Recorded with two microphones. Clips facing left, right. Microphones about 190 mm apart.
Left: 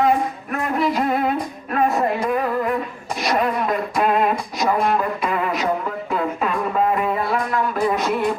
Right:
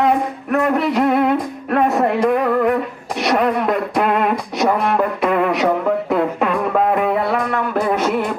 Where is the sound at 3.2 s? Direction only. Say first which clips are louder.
Right 4 dB; 65° right (ahead or behind).